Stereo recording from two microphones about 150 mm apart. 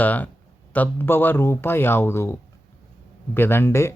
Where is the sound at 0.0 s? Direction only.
10° left (ahead or behind).